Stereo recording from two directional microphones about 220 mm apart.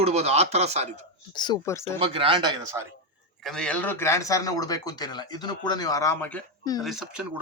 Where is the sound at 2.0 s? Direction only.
25° right (ahead or behind).